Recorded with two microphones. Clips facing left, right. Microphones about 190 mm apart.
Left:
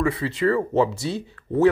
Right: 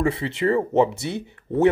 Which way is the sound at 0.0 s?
25° right (ahead or behind).